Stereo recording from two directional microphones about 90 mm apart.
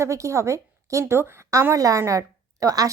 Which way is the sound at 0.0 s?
35° right (ahead or behind).